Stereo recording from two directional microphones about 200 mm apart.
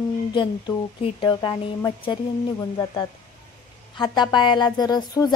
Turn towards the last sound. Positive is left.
turn(degrees=20)  # may be behind; listen again after turning